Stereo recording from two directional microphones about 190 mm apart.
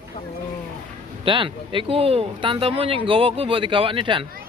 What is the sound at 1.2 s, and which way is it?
Speech, 25° right (ahead or behind).